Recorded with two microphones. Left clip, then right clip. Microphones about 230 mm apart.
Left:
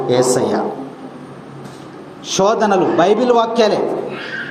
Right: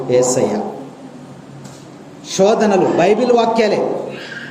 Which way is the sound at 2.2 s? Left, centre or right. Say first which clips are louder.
Right 1 dB; centre.